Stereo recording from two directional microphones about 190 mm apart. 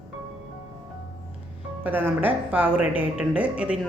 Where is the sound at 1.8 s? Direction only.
10° right (ahead or behind).